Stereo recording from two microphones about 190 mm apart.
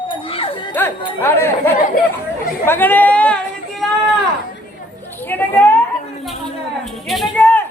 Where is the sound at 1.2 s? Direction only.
15° left (ahead or behind).